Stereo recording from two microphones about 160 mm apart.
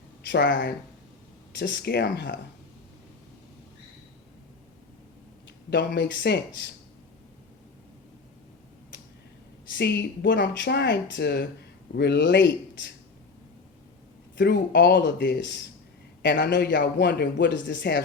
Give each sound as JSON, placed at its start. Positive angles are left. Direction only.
{"t": 0.2, "sound": "speech", "side_deg": 90}
{"t": 5.7, "sound": "speech", "side_deg": 90}
{"t": 9.7, "sound": "speech", "side_deg": 90}
{"t": 14.3, "sound": "speech", "side_deg": 90}